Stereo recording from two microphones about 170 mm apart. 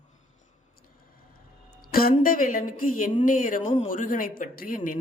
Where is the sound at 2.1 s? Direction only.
55° left (ahead or behind).